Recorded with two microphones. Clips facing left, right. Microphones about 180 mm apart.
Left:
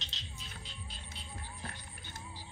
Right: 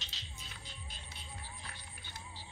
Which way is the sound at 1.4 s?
50° left (ahead or behind).